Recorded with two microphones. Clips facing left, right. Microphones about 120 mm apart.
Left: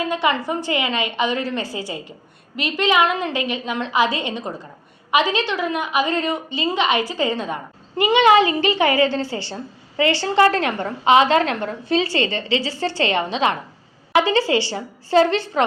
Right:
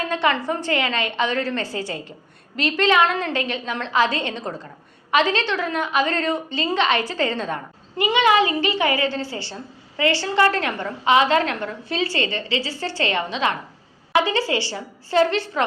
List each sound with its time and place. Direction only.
0.0 s a woman's voice: 10° left (ahead or behind)
7.9 s a woman's voice: 25° left (ahead or behind)